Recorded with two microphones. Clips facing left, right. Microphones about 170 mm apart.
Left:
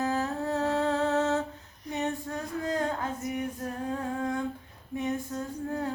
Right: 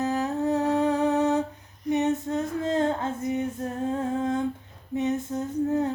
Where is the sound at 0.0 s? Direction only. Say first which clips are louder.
Right 4 dB; 20° right (ahead or behind).